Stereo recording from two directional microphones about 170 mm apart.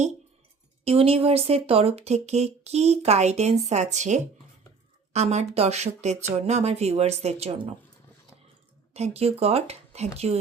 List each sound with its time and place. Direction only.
0.9 s speech: 35° right (ahead or behind)
8.9 s speech: 40° right (ahead or behind)